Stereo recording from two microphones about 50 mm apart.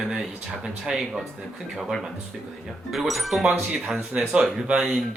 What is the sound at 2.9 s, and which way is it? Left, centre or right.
Speech, centre.